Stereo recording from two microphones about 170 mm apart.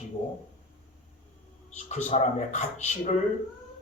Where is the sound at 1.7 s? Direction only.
45° left (ahead or behind).